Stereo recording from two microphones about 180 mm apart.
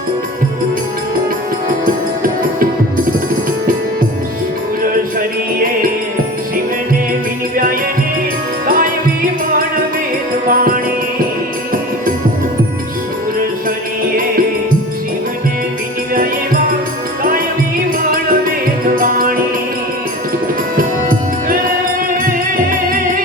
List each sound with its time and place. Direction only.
8.6 s music: 50° right (ahead or behind)
10.5 s music: 50° right (ahead or behind)
16.1 s music: 50° right (ahead or behind)
20.7 s music: 50° right (ahead or behind)
22.9 s music: 50° right (ahead or behind)